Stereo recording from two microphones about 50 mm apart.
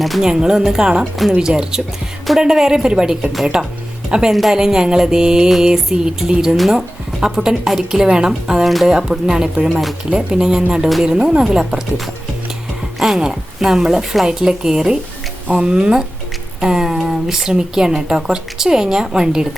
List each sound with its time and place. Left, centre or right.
0.2 s a woman's voice: centre
8.6 s speech: centre
8.9 s a woman's voice: centre
13.0 s a woman's voice: centre